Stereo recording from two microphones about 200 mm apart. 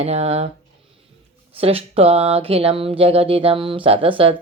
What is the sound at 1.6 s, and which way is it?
Speech, 30° right (ahead or behind).